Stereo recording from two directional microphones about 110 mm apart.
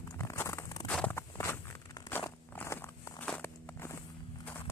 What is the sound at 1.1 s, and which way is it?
Walk, 25° left (ahead or behind).